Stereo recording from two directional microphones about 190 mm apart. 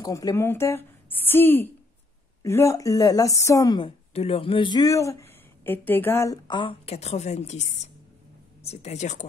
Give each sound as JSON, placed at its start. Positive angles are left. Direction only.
{"t": 0.0, "sound": "a woman's voice", "side_deg": 20}